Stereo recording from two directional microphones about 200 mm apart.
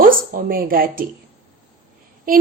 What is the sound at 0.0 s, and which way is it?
Speech, 45° right (ahead or behind).